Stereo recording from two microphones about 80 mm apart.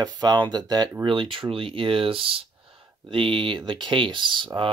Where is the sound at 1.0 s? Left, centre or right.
Right.